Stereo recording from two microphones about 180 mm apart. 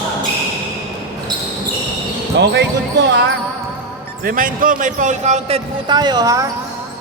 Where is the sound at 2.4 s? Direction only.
75° right (ahead or behind).